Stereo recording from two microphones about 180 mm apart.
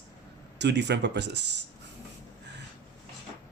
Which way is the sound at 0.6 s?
70° right (ahead or behind).